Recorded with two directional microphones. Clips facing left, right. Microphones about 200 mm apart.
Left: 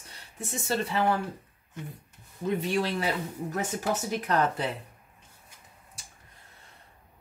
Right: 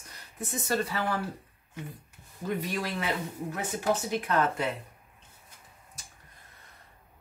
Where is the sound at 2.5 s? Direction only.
30° left (ahead or behind).